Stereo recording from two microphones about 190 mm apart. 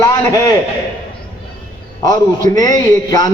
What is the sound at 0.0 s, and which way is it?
Speech, 20° left (ahead or behind).